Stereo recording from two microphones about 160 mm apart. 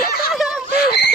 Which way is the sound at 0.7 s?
90° left.